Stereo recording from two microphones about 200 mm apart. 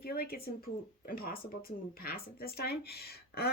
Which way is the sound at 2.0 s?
50° left (ahead or behind).